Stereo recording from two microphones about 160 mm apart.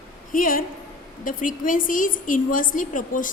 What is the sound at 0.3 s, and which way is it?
A woman's voice, 60° left (ahead or behind).